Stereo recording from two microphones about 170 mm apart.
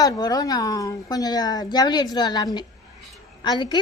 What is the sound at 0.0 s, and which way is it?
A woman's voice, 20° left (ahead or behind).